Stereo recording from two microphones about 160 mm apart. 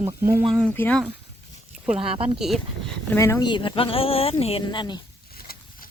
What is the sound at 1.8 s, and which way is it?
Speech, 5° right (ahead or behind).